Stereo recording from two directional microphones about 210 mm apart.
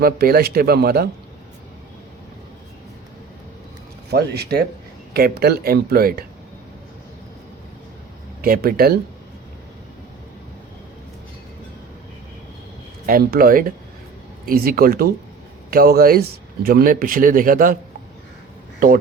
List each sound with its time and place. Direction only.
0.0 s speech: 45° right (ahead or behind)
4.1 s speech: 50° right (ahead or behind)
8.4 s speech: 45° right (ahead or behind)
13.1 s speech: 45° right (ahead or behind)